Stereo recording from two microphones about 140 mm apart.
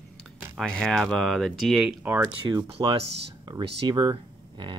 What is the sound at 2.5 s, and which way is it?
Speech, 30° right (ahead or behind).